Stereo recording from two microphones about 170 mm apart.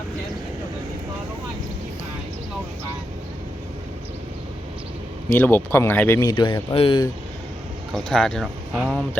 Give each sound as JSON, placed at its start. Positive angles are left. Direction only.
{"t": 5.3, "sound": "speech", "side_deg": 10}
{"t": 6.3, "sound": "speech", "side_deg": 30}
{"t": 7.9, "sound": "speech", "side_deg": 5}